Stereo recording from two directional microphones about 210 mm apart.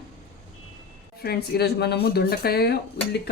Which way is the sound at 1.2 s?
50° left (ahead or behind).